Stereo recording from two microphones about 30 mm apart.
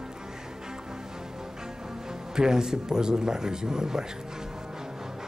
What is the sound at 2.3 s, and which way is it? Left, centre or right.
Speech, right.